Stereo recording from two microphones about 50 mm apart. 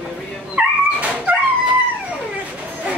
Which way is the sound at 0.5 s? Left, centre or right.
Right.